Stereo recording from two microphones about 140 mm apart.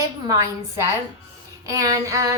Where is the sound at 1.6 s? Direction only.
25° right (ahead or behind).